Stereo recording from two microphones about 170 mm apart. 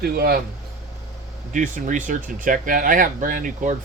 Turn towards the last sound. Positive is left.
turn(degrees=-50)  # may be behind; listen again after turning